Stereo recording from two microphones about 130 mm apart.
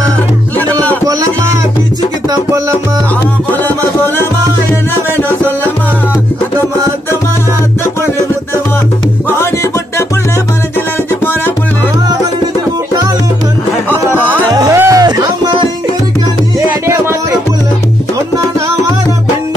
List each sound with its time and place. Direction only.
13.8 s music: 15° left (ahead or behind)
14.5 s music: 30° right (ahead or behind)